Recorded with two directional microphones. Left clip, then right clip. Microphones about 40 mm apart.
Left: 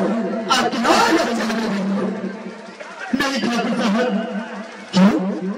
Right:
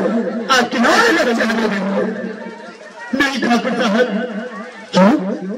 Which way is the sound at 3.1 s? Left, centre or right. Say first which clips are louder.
Right 5 dB; right.